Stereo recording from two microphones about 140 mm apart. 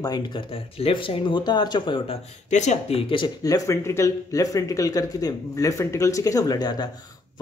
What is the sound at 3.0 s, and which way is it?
Speech, 40° left (ahead or behind).